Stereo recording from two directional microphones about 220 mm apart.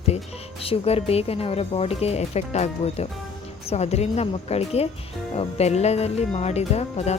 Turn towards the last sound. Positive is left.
turn(degrees=30)  # may be behind; listen again after turning